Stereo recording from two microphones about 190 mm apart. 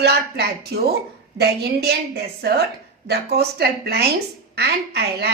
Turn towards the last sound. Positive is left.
turn(degrees=-60)  # may be behind; listen again after turning